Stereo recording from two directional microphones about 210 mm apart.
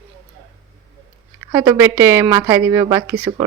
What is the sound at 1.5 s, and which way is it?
A woman's voice, 15° right (ahead or behind).